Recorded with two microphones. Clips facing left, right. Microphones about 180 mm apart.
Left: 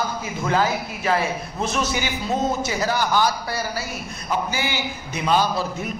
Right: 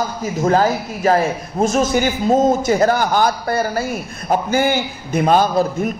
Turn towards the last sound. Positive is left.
turn(degrees=-50)  # may be behind; listen again after turning